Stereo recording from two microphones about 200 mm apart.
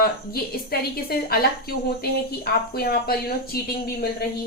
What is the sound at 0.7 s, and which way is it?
Speech, 50° left (ahead or behind).